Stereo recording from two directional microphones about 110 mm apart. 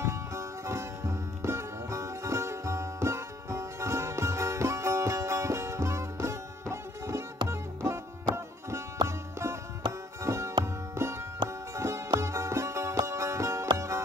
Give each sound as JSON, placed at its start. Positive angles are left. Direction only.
{"t": 0.0, "sound": "music", "side_deg": -25}
{"t": 10.2, "sound": "sitar", "side_deg": -25}
{"t": 10.6, "sound": "music", "side_deg": -25}